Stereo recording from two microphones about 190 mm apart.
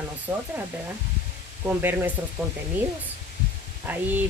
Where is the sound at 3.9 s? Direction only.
10° right (ahead or behind).